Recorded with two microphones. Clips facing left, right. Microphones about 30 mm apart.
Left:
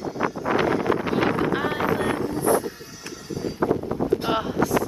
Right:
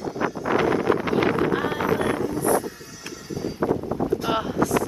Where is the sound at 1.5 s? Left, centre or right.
Left.